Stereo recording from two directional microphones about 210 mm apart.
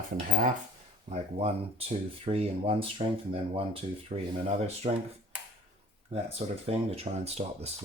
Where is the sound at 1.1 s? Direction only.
30° right (ahead or behind).